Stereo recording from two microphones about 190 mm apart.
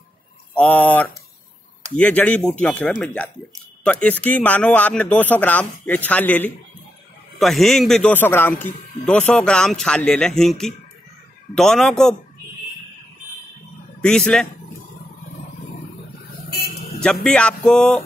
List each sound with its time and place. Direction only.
0.6 s a man's voice: 10° left (ahead or behind)
14.0 s a man's voice: 5° left (ahead or behind)
16.4 s vehicle: 55° left (ahead or behind)
17.0 s a man's voice: 5° left (ahead or behind)